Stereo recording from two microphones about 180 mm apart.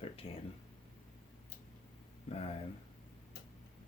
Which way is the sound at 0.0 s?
30° left (ahead or behind).